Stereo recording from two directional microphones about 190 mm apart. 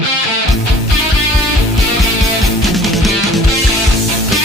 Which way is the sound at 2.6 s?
Centre (ahead or behind).